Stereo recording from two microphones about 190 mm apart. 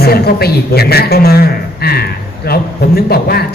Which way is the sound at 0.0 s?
55° left (ahead or behind).